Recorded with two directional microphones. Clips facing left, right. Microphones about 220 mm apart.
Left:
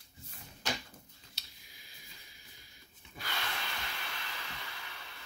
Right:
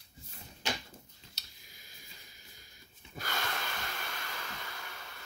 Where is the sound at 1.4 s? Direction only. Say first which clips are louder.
Even; 45° right (ahead or behind).